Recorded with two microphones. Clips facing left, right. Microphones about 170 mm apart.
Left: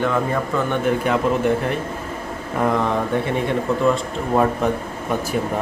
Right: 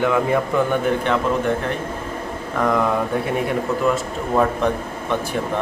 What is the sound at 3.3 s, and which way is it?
Speech, 5° right (ahead or behind).